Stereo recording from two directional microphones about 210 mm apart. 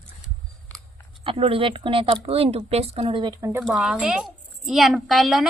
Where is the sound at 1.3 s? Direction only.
25° right (ahead or behind).